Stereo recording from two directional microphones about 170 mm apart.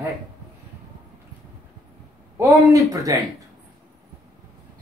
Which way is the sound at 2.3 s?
20° right (ahead or behind).